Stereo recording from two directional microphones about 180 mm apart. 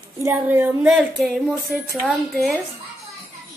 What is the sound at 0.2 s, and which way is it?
A woman's voice, 10° right (ahead or behind).